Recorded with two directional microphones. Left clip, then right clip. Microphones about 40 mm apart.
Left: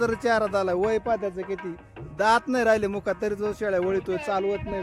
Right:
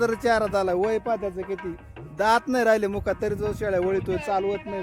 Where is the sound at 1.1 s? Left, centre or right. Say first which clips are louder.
Even; right.